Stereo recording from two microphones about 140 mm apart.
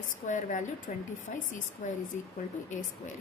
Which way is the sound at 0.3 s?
60° left (ahead or behind).